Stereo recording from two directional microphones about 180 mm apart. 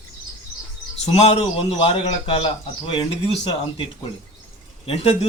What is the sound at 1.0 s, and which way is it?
A man's voice, 35° left (ahead or behind).